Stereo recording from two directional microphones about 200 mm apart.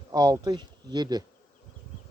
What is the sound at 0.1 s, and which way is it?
Speech, 20° right (ahead or behind).